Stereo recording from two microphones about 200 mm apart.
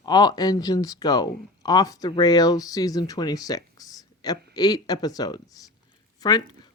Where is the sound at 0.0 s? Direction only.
20° left (ahead or behind).